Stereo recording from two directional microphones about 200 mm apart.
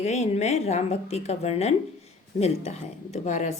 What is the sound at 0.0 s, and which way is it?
Speech, 35° left (ahead or behind).